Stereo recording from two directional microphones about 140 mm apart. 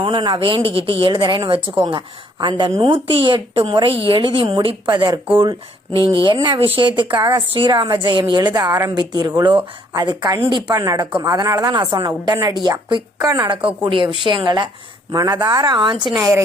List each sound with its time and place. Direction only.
0.0 s a woman's voice: 35° right (ahead or behind)
13.8 s a woman's voice: 35° right (ahead or behind)
16.1 s a woman's voice: 20° right (ahead or behind)